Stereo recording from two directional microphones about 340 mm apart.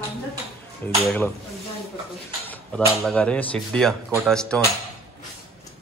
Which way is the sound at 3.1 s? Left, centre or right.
Centre.